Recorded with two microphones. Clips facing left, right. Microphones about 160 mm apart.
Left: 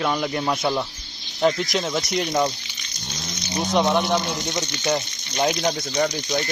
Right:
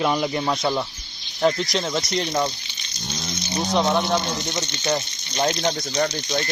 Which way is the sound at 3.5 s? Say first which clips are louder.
Left 1 dB; 15° left (ahead or behind).